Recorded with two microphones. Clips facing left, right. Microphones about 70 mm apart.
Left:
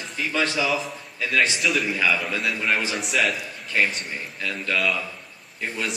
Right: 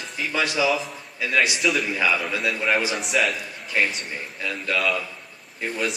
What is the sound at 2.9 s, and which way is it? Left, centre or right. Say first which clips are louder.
Speech: even; centre.